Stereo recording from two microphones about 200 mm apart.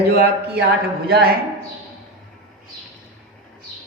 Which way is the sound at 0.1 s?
50° right (ahead or behind).